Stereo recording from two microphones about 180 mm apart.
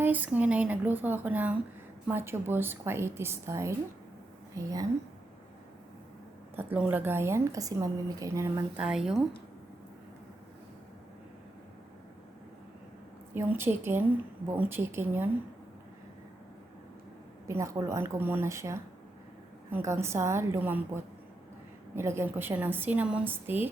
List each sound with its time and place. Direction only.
0.0 s a woman's voice: 10° right (ahead or behind)
6.6 s a woman's voice: 10° right (ahead or behind)
8.8 s speech: 5° right (ahead or behind)
13.3 s a woman's voice: 15° right (ahead or behind)
17.5 s a woman's voice: 15° right (ahead or behind)